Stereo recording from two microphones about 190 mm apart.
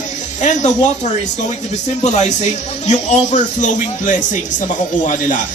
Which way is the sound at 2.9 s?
35° left (ahead or behind).